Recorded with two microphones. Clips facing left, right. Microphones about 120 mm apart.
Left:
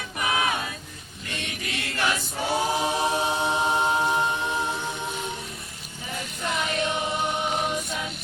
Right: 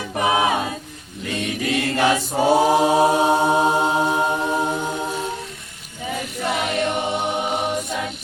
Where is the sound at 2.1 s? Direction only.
45° right (ahead or behind).